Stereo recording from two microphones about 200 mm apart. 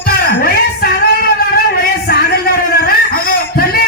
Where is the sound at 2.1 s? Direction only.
50° left (ahead or behind).